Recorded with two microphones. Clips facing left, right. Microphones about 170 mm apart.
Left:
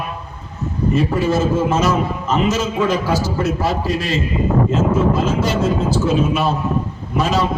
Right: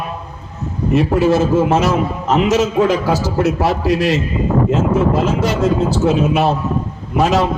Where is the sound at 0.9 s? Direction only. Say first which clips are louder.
Right 5 dB; 70° right (ahead or behind).